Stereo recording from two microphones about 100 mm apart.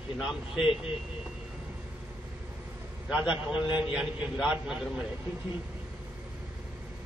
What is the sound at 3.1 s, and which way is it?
A man's voice, 10° right (ahead or behind).